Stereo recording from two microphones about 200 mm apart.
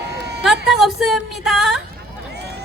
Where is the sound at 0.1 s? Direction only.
55° right (ahead or behind).